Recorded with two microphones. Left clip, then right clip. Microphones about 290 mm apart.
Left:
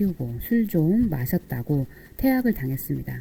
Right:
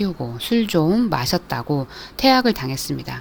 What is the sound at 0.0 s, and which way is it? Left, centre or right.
A woman's voice, right.